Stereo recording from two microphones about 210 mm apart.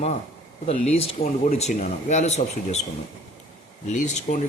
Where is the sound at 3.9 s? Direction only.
35° left (ahead or behind).